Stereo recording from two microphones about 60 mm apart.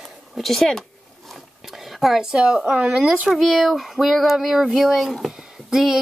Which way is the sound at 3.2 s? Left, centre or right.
Centre.